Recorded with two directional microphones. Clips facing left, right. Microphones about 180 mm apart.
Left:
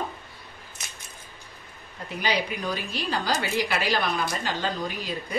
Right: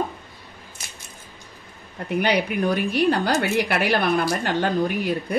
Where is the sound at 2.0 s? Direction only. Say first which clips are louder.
Right 6 dB; 60° right (ahead or behind).